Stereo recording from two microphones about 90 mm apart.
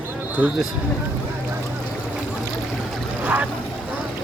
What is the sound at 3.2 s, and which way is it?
Boat, 15° right (ahead or behind).